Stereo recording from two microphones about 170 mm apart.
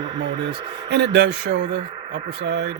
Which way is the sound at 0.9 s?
80° right.